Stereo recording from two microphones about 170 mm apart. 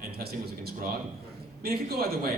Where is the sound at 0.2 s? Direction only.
65° right (ahead or behind).